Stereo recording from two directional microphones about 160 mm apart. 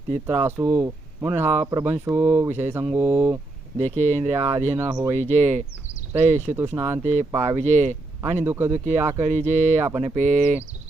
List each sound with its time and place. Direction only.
0.1 s speech: 15° right (ahead or behind)
3.8 s speech: 45° right (ahead or behind)
4.4 s speech: 15° right (ahead or behind)
5.1 s speech: 45° right (ahead or behind)
6.5 s speech: 15° right (ahead or behind)
7.0 s speech: 45° right (ahead or behind)
7.3 s speech: 15° right (ahead or behind)
7.6 s speech: 45° right (ahead or behind)
8.4 s speech: 15° right (ahead or behind)
9.2 s speech: 45° right (ahead or behind)